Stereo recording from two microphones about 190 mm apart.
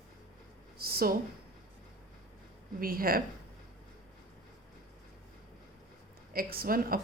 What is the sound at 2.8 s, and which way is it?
Speech, 50° right (ahead or behind).